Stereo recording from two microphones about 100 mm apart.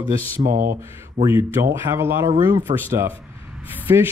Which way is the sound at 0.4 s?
90° right.